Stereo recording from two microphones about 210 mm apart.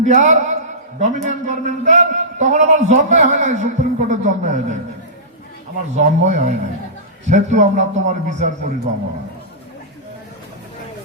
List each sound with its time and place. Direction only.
0.0 s a man's voice: 35° right (ahead or behind)
6.0 s a man's voice: 35° right (ahead or behind)